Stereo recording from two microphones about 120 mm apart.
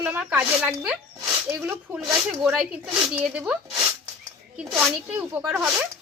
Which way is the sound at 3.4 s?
20° right (ahead or behind).